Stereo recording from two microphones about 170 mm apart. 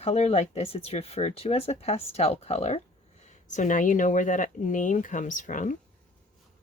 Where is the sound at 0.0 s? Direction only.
35° left (ahead or behind).